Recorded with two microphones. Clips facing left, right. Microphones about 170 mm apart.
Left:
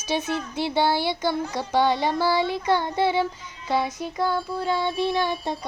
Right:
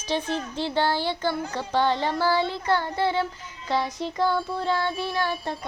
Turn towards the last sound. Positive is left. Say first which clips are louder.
# left 3 dB
turn(degrees=20)  # may be behind; listen again after turning